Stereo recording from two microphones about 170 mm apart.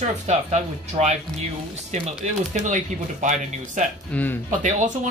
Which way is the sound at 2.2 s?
45° right (ahead or behind).